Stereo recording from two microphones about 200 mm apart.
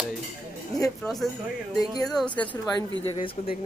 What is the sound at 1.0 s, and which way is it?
A man's voice, centre (ahead or behind).